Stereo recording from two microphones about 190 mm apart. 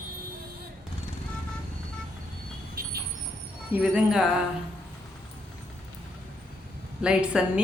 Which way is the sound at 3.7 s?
5° right (ahead or behind).